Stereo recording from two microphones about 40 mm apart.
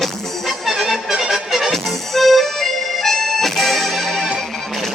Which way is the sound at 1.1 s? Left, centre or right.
Centre.